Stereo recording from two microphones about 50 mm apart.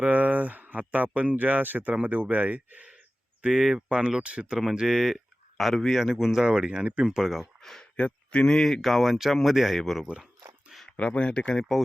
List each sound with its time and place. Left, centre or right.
0.0 s speech: right
3.5 s a man's voice: centre
6.0 s speech: centre
6.4 s speech: centre
7.6 s a sound: centre
7.9 s speech: left
8.4 s speech: centre
10.9 s speech: left